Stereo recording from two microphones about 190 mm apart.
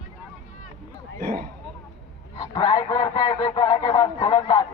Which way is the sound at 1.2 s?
55° right (ahead or behind).